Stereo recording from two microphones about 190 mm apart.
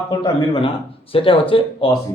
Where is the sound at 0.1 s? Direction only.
25° left (ahead or behind).